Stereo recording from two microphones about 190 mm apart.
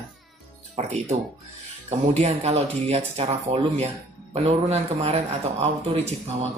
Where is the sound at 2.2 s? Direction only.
35° right (ahead or behind).